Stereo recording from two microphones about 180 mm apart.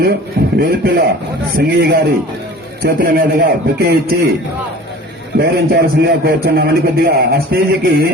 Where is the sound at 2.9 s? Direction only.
55° right (ahead or behind).